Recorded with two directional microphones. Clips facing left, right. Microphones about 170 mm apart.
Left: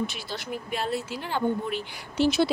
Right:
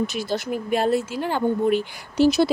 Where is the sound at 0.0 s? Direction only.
45° right (ahead or behind).